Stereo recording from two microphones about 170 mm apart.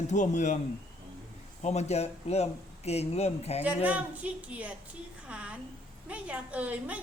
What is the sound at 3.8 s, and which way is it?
A woman's voice, 10° right (ahead or behind).